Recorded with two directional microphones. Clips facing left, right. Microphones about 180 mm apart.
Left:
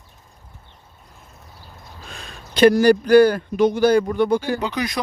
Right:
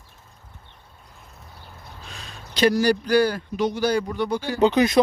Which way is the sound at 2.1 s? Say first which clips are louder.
Left 6 dB; 55° left (ahead or behind).